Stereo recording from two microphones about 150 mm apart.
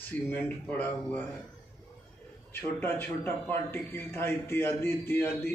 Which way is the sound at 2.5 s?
15° left (ahead or behind).